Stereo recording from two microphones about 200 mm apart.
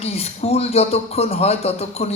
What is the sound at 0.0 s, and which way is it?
A man's voice, 30° left (ahead or behind).